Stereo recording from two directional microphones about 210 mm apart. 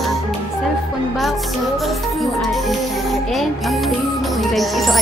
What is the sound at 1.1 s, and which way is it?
Music, centre (ahead or behind).